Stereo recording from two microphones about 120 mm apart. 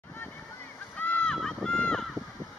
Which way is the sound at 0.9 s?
15° left (ahead or behind).